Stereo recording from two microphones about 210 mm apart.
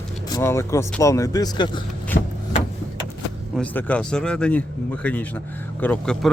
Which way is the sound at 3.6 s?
5° left (ahead or behind).